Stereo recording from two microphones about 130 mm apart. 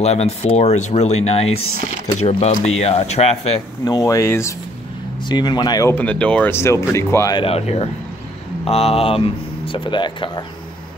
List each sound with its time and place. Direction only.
0.0 s speech: 55° left (ahead or behind)
2.6 s speech: 55° left (ahead or behind)
3.8 s speech: 25° left (ahead or behind)
5.3 s speech: 35° left (ahead or behind)
5.9 s speech: 10° left (ahead or behind)
6.5 s speech: 20° left (ahead or behind)
7.3 s speech: 50° left (ahead or behind)